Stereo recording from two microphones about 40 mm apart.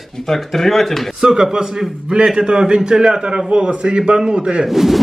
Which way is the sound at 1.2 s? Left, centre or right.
Centre.